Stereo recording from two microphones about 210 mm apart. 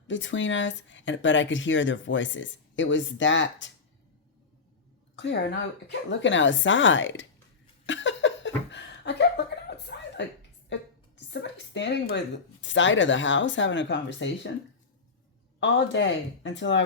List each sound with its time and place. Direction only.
0.1 s speech: 60° left (ahead or behind)
5.1 s speech: 55° left (ahead or behind)
7.9 s laughter: 60° left (ahead or behind)
11.3 s a woman's voice: 55° left (ahead or behind)
15.6 s speech: 60° left (ahead or behind)